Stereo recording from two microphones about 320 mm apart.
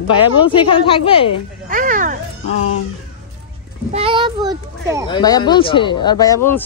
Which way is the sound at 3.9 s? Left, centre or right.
Centre.